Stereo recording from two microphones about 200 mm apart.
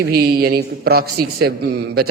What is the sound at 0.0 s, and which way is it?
A man's voice, 50° right (ahead or behind).